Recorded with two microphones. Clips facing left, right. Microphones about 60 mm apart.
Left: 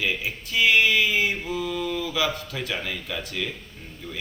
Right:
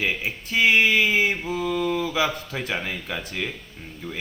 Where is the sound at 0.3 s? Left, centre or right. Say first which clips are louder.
Right 2 dB; right.